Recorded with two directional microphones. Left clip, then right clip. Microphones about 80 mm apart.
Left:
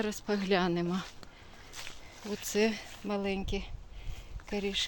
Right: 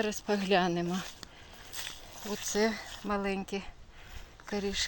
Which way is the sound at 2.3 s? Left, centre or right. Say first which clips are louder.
Even; left.